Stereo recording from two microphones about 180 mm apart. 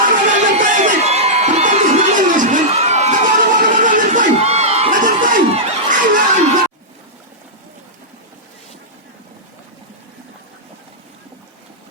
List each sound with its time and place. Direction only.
0.3 s crowd: 45° right (ahead or behind)